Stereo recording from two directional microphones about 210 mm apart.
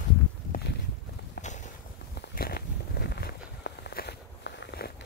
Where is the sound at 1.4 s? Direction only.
50° left (ahead or behind).